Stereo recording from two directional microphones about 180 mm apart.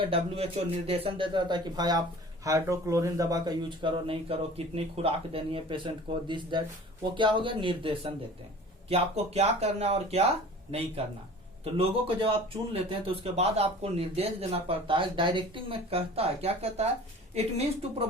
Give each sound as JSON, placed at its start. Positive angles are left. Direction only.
{"t": 0.0, "sound": "a man's voice", "side_deg": -35}